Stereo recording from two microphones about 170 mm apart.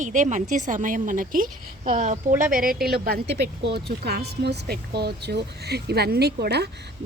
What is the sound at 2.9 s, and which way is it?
A woman's voice, 70° right (ahead or behind).